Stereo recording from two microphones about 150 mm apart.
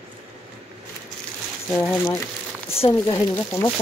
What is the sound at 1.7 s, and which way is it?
Speech, 15° left (ahead or behind).